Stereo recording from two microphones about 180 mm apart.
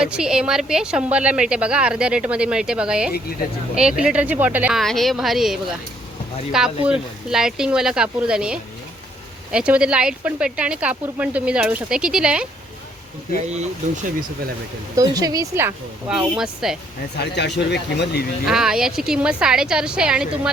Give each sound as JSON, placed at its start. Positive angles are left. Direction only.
{"t": 0.0, "sound": "a woman's voice", "side_deg": -5}
{"t": 13.5, "sound": "speech", "side_deg": -40}
{"t": 14.9, "sound": "speech", "side_deg": -20}
{"t": 17.2, "sound": "speech", "side_deg": 70}
{"t": 18.4, "sound": "a woman's voice", "side_deg": -5}